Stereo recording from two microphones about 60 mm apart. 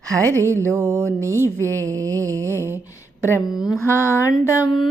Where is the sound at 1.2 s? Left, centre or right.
Right.